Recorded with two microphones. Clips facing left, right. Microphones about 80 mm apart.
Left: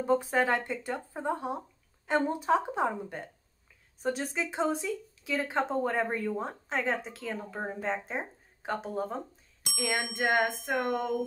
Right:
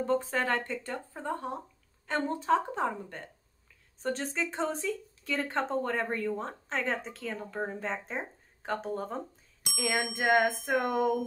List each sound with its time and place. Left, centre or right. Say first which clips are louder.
0.0 s speech: left 3 dB; centre
9.8 s bicycle bell: even; centre